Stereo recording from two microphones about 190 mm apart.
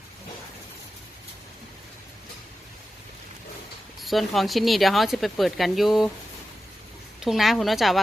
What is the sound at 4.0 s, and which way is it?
Speech, centre (ahead or behind).